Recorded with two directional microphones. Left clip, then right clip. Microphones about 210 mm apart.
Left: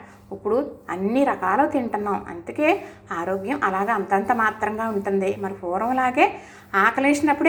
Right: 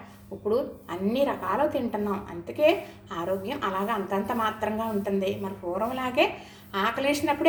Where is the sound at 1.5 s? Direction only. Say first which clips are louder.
Left 5 dB; 15° left (ahead or behind).